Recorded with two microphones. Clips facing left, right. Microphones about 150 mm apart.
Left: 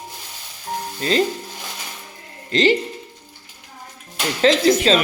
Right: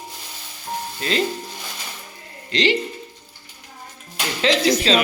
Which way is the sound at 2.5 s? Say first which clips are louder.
Left 4 dB; 45° left (ahead or behind).